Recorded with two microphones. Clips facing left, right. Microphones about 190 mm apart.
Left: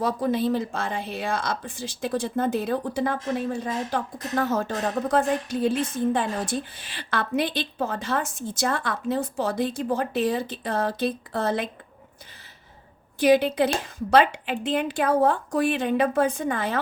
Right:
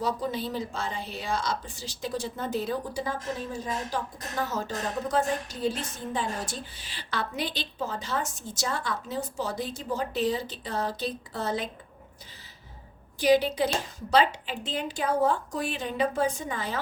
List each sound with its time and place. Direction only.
0.0 s a woman's voice: 55° left (ahead or behind)
13.1 s a woman's voice: 55° left (ahead or behind)